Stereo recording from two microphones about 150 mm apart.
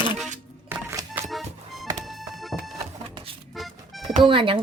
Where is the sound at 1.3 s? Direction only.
Centre (ahead or behind).